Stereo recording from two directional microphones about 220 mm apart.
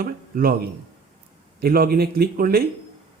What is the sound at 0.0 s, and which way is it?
Speech, 40° right (ahead or behind).